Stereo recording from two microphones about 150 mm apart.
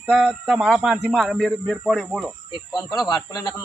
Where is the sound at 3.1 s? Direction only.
25° left (ahead or behind).